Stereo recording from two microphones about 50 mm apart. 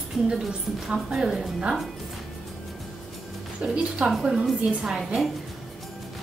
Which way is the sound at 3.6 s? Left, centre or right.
Right.